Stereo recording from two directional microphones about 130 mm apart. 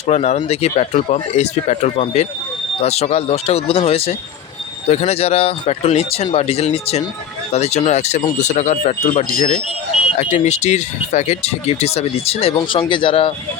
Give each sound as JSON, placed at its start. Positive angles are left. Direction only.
{"t": 0.0, "sound": "speech", "side_deg": 60}
{"t": 10.2, "sound": "speech", "side_deg": 60}